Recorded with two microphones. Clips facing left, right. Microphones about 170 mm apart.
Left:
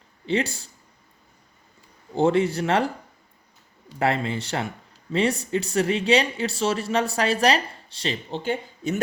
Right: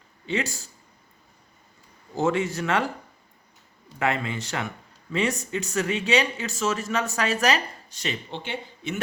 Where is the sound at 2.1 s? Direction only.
30° left (ahead or behind).